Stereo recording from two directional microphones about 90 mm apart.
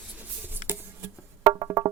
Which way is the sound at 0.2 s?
20° right (ahead or behind).